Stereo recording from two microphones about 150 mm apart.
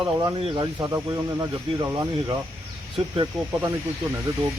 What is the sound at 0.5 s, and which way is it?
Speech, 30° right (ahead or behind).